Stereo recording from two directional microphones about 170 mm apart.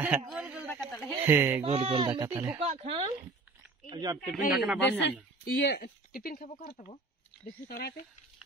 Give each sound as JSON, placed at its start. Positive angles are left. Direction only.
{"t": 0.3, "sound": "a sound", "side_deg": -5}
{"t": 1.2, "sound": "speech", "side_deg": -10}
{"t": 1.6, "sound": "speech", "side_deg": -35}
{"t": 2.0, "sound": "speech", "side_deg": -20}
{"t": 2.6, "sound": "speech", "side_deg": -40}
{"t": 3.9, "sound": "speech", "side_deg": -25}
{"t": 4.5, "sound": "speech", "side_deg": -5}
{"t": 5.4, "sound": "speech", "side_deg": 70}
{"t": 7.6, "sound": "speech", "side_deg": 65}